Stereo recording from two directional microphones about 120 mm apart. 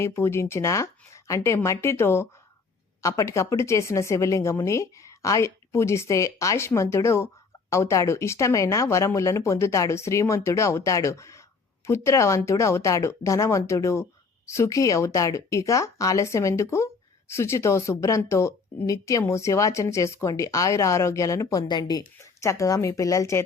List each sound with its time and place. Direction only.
0.0 s speech: 20° left (ahead or behind)